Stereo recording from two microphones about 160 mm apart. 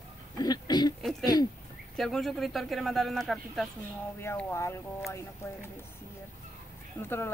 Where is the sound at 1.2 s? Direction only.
25° left (ahead or behind).